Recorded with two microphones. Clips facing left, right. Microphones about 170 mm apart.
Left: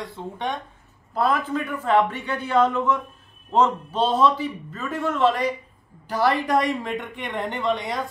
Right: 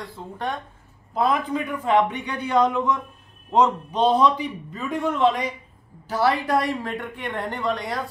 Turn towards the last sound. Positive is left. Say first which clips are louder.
# left 1 dB
turn(degrees=0)  # may be behind; listen again after turning